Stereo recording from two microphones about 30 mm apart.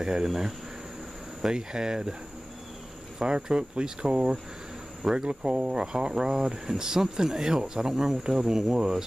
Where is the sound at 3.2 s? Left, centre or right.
Right.